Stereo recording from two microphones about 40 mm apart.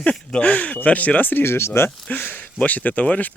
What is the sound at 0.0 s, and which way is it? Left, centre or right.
Speech, left.